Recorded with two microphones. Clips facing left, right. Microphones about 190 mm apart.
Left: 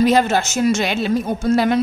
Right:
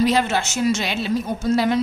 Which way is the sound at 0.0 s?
45° left (ahead or behind).